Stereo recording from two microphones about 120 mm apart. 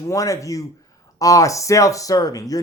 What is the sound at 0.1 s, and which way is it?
A man's voice, 30° left (ahead or behind).